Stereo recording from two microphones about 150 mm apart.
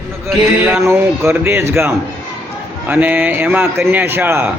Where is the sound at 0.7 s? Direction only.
15° right (ahead or behind).